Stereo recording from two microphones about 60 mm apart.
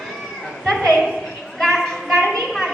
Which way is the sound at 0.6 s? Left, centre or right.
Centre.